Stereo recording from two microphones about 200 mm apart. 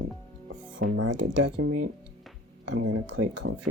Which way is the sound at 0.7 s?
70° right (ahead or behind).